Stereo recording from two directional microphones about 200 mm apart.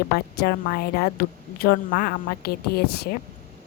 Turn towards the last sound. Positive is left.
turn(degrees=55)  # may be behind; listen again after turning